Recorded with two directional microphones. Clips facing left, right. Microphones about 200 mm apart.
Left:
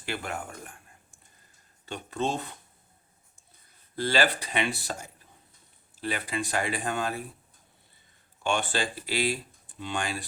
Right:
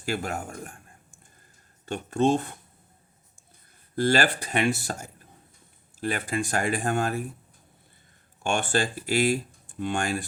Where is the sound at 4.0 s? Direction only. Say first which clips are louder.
Right 3 dB; 50° right (ahead or behind).